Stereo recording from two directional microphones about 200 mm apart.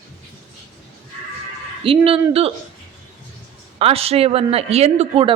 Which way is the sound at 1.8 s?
25° right (ahead or behind).